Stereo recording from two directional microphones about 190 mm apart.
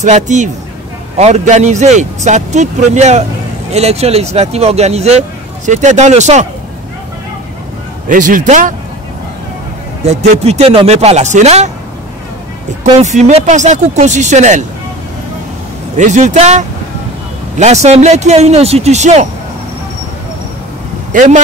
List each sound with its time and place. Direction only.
0.0 s a man's voice: 40° right (ahead or behind)
8.1 s speech: 45° right (ahead or behind)
10.0 s a man's voice: 35° right (ahead or behind)
12.8 s a man's voice: 40° right (ahead or behind)
16.0 s a man's voice: 40° right (ahead or behind)
21.1 s speech: 45° right (ahead or behind)